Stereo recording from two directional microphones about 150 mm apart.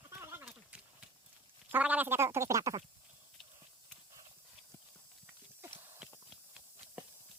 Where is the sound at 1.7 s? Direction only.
10° right (ahead or behind).